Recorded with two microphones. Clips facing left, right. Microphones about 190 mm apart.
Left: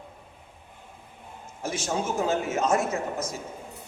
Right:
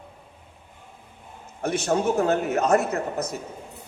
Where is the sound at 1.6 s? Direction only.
65° right (ahead or behind).